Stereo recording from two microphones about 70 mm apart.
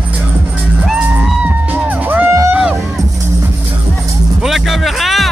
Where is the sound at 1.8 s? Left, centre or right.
Right.